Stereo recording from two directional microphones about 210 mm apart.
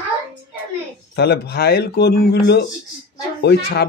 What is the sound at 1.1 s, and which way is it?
Speech, 50° left (ahead or behind).